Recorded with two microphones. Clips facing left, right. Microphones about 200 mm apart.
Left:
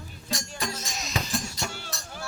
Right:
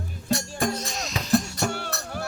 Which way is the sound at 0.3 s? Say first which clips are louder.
Right 8 dB; 60° right (ahead or behind).